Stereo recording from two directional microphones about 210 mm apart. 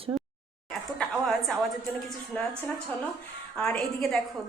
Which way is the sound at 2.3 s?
5° left (ahead or behind).